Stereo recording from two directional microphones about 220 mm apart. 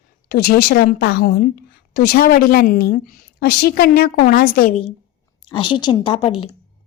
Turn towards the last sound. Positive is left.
turn(degrees=90)